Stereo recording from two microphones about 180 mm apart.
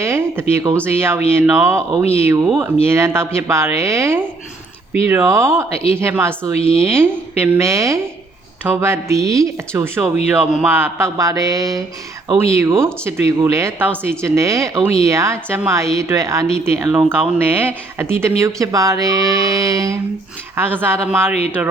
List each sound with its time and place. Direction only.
0.0 s a sound: 15° right (ahead or behind)
0.5 s speech: 20° right (ahead or behind)
6.6 s speech: 30° left (ahead or behind)
6.9 s speech: 10° right (ahead or behind)